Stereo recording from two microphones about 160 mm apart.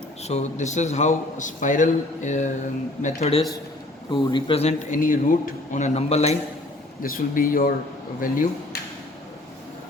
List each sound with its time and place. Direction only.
0.2 s a man's voice: 45° left (ahead or behind)
4.9 s a man's voice: 60° left (ahead or behind); by 6.3 s 40° left (ahead or behind)
7.0 s speech: 60° left (ahead or behind)